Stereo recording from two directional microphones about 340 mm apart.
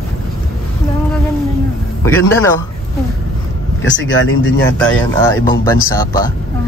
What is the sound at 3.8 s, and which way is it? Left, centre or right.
Speech, left.